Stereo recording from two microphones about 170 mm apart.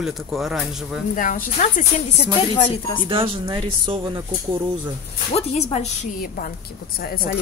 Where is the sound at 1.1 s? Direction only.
50° left (ahead or behind).